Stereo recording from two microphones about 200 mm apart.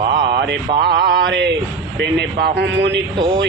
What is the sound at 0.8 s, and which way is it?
Mantra, 50° right (ahead or behind).